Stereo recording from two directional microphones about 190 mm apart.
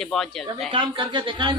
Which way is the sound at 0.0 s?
Centre (ahead or behind).